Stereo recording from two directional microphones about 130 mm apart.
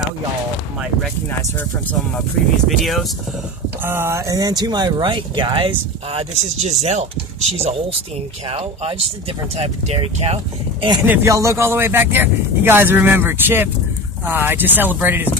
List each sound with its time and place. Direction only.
1.6 s speech: 15° left (ahead or behind)
2.8 s speech: centre (ahead or behind)
3.8 s speech: 20° right (ahead or behind); by 6.2 s 45° right (ahead or behind)
6.3 s speech: 60° right (ahead or behind)
11.1 s speech: 25° right (ahead or behind)